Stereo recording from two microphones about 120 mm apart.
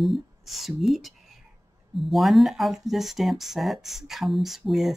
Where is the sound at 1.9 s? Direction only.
Centre (ahead or behind).